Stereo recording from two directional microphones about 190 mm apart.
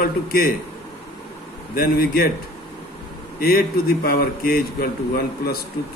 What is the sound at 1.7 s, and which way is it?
Speech, 50° left (ahead or behind).